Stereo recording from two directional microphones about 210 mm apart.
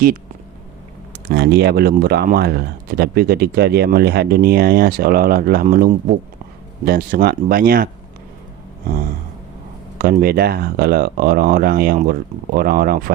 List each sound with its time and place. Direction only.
1.3 s speech: 50° right (ahead or behind)
10.0 s speech: 45° right (ahead or behind)